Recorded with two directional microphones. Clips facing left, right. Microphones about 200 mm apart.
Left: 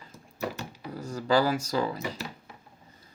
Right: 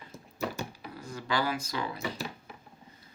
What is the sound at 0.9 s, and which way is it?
Speech, 40° left (ahead or behind).